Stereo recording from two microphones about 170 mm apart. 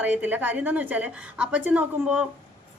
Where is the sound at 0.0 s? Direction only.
10° right (ahead or behind).